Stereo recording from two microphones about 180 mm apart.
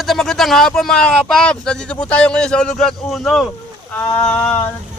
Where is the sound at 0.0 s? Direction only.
Centre (ahead or behind).